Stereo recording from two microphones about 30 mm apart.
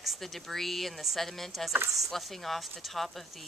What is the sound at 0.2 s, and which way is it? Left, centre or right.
Speech, centre.